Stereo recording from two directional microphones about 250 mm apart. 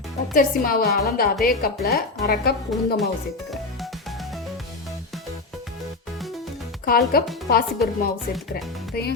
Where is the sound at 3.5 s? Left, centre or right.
Centre.